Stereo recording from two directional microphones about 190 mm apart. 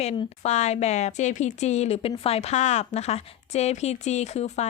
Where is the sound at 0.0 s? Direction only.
35° left (ahead or behind).